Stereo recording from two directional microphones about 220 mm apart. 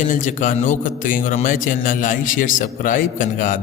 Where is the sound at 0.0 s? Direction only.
35° left (ahead or behind).